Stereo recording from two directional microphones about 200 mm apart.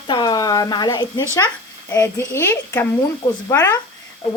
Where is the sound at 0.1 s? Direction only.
20° left (ahead or behind).